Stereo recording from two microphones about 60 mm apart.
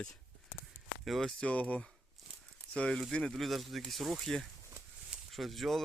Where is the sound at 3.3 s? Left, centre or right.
Centre.